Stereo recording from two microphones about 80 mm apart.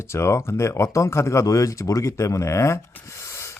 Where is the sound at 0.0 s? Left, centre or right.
Left.